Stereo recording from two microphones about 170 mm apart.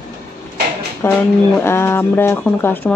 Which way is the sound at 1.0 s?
15° left (ahead or behind).